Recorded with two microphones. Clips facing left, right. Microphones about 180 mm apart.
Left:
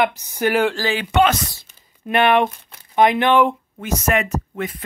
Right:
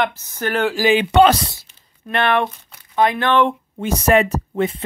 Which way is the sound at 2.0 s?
15° left (ahead or behind).